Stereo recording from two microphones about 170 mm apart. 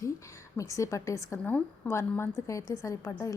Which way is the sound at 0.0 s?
15° left (ahead or behind).